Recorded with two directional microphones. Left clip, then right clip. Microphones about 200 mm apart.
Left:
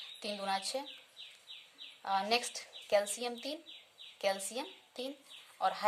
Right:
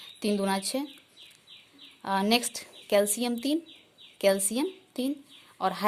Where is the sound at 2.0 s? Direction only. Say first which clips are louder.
Right 6 dB; 55° right (ahead or behind).